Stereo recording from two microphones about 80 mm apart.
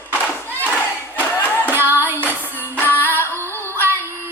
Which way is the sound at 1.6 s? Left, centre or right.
Right.